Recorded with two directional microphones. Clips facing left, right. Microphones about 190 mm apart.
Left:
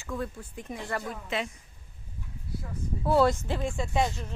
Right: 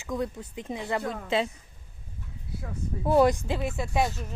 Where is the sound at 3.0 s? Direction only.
15° right (ahead or behind).